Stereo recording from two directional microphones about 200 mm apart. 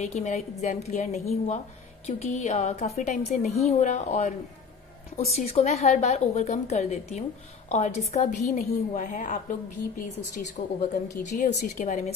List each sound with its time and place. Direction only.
0.0 s a woman's voice: 35° left (ahead or behind)
10.6 s a woman's voice: 35° left (ahead or behind)